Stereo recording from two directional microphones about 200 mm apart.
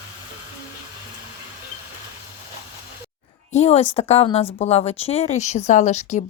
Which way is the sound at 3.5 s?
35° left (ahead or behind).